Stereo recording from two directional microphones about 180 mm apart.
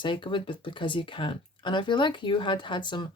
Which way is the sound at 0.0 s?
25° left (ahead or behind).